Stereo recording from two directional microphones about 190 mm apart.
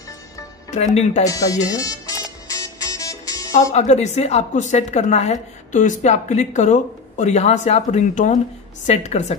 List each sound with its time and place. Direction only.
0.7 s a woman's voice: 40° left (ahead or behind)
1.2 s speech: 20° left (ahead or behind)
2.4 s music: 20° left (ahead or behind)
3.7 s a woman's voice: 35° left (ahead or behind)